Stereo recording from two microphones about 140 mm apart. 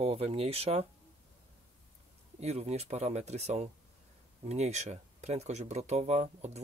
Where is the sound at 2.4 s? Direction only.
50° right (ahead or behind).